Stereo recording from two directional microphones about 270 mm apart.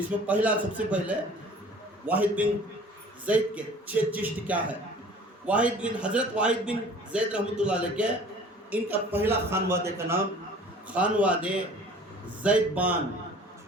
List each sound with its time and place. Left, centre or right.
0.3 s a man's voice: centre